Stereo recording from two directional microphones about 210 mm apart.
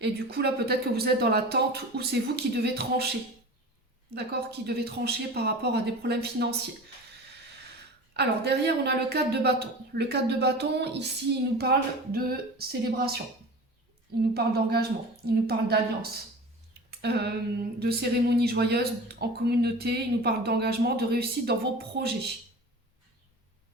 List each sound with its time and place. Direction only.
0.0 s speech: 50° right (ahead or behind)
4.1 s speech: 50° right (ahead or behind)
8.1 s speech: 50° right (ahead or behind)
14.3 s speech: 50° right (ahead or behind)
16.9 s a sound: 50° right (ahead or behind)
17.7 s speech: 50° right (ahead or behind)